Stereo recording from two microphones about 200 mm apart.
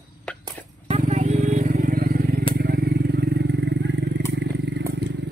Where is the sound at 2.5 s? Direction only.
50° right (ahead or behind).